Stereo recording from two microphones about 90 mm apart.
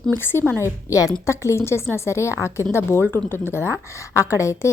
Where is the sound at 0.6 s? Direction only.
35° left (ahead or behind).